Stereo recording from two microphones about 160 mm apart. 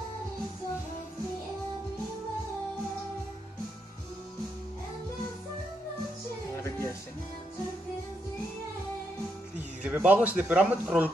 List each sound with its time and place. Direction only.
6.6 s music: 15° left (ahead or behind)
9.6 s speech: 10° right (ahead or behind)